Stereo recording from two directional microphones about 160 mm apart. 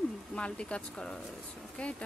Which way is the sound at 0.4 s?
5° left (ahead or behind).